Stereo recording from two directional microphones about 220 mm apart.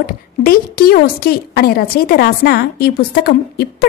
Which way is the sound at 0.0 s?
40° left (ahead or behind).